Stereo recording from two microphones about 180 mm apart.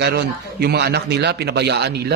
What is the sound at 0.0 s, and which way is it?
A man's voice, 65° right (ahead or behind).